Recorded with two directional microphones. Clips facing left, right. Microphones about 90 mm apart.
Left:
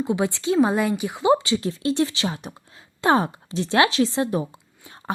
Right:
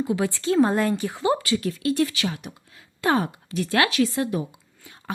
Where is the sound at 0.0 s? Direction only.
20° left (ahead or behind).